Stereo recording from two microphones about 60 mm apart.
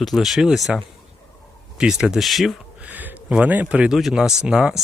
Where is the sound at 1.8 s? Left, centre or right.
Centre.